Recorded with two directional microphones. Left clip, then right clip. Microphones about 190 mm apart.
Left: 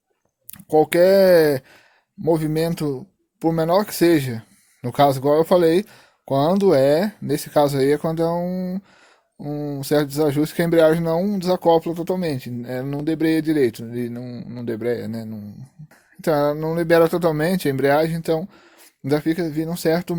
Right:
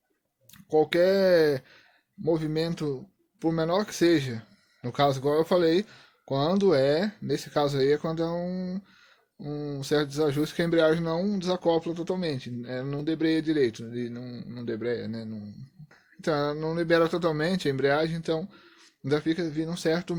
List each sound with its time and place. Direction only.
0.5 s speech: 45° left (ahead or behind)